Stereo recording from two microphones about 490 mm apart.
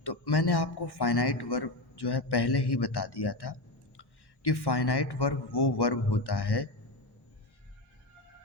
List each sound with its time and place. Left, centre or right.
0.0 s speech: left